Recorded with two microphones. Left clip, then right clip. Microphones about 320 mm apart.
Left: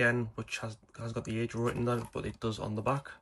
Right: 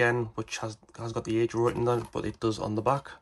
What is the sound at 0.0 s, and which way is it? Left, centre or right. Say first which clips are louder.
Speech: right 3 dB; centre.